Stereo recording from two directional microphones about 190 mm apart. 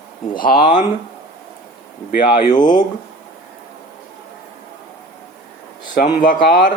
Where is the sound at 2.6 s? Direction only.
45° left (ahead or behind).